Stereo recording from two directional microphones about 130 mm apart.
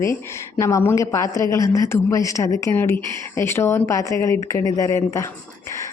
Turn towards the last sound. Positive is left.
turn(degrees=25)  # may be behind; listen again after turning